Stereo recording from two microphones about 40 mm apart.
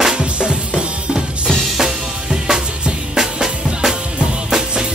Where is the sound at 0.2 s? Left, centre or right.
Right.